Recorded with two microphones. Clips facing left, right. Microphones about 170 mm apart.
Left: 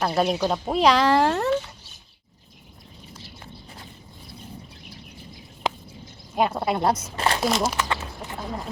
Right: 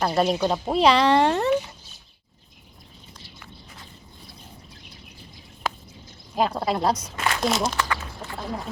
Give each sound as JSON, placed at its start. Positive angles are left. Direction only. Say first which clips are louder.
{"t": 0.0, "sound": "speech", "louder": "right 1 dB", "side_deg": 0}
{"t": 1.5, "sound": "speech", "louder": "right 1 dB", "side_deg": -15}
{"t": 6.3, "sound": "speech", "louder": "left 1 dB", "side_deg": 5}
{"t": 6.9, "sound": "speech", "louder": "left 2 dB", "side_deg": 30}
{"t": 7.4, "sound": "speech", "louder": "right 2 dB", "side_deg": 5}
{"t": 7.8, "sound": "speech", "louder": "even", "side_deg": 20}